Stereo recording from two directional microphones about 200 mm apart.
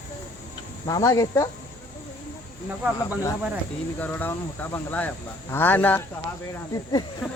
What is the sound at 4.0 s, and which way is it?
Speech, 10° left (ahead or behind).